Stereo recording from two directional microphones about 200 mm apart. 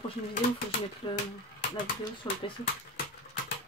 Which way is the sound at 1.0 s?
20° left (ahead or behind).